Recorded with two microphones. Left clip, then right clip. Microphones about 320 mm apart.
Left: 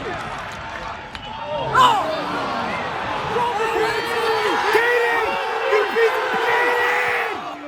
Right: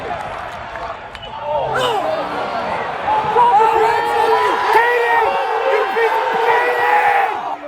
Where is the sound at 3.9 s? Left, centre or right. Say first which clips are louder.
Right 6 dB; right.